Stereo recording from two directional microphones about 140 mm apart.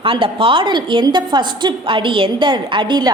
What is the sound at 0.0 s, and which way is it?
A woman's voice, 40° right (ahead or behind).